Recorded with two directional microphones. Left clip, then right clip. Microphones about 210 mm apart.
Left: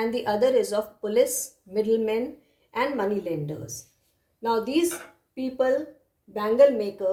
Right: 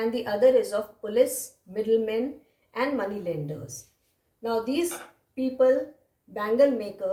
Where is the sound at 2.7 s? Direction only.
45° left (ahead or behind).